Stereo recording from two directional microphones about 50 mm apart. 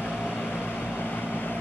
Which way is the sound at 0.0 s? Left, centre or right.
Left.